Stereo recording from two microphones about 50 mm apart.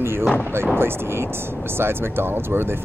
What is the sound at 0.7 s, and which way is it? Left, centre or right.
Speech, right.